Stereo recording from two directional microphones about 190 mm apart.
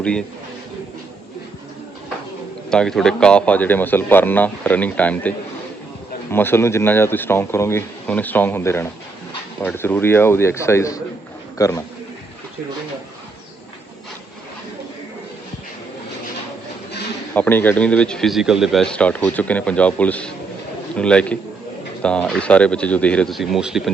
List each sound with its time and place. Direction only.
0.0 s a man's voice: 5° left (ahead or behind)
2.6 s speech: 5° left (ahead or behind)
6.3 s a man's voice: 10° left (ahead or behind)
17.3 s speech: 10° left (ahead or behind)